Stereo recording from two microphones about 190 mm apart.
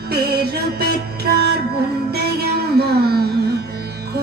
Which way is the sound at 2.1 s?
55° right (ahead or behind).